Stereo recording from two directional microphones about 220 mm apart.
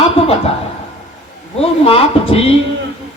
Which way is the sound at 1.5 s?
25° left (ahead or behind).